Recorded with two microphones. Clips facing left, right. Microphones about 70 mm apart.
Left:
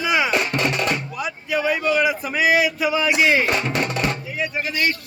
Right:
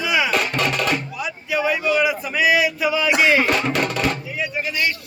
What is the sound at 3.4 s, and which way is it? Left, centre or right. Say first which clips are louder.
Music: right 2 dB; left.